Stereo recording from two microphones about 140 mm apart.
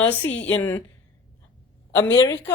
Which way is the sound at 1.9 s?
20° left (ahead or behind).